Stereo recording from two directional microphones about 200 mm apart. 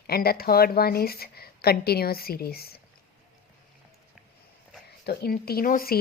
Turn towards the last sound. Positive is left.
turn(degrees=45)  # may be behind; listen again after turning